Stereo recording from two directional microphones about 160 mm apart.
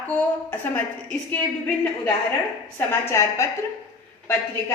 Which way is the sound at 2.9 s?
15° left (ahead or behind).